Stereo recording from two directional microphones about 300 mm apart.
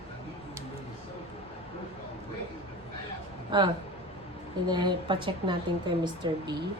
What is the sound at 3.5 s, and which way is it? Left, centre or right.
A woman's voice, centre.